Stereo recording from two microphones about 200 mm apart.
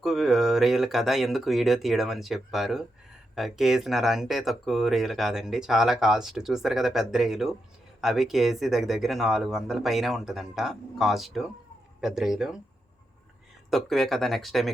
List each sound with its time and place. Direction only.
0.0 s speech: centre (ahead or behind)
13.7 s speech: centre (ahead or behind)